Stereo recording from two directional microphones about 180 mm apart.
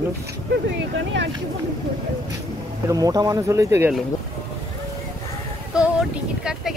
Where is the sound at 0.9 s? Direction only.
90° right.